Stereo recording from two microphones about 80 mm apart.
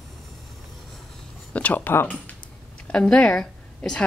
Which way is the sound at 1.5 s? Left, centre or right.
Centre.